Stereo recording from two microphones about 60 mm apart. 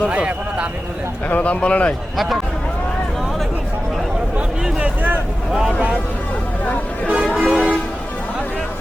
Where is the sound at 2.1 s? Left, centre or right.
Centre.